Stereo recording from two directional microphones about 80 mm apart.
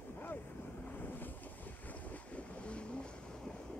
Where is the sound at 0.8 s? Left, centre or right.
Left.